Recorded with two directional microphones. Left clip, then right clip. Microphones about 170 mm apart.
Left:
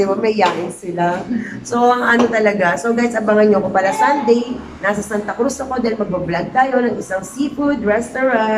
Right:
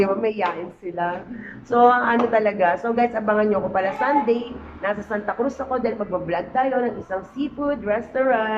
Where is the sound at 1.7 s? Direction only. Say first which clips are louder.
Left 2 dB; 10° right (ahead or behind).